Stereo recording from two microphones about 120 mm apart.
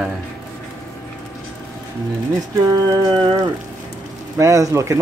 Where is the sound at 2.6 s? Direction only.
30° right (ahead or behind).